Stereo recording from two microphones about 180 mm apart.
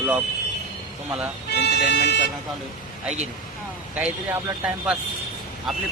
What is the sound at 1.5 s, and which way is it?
Speech, 65° left (ahead or behind).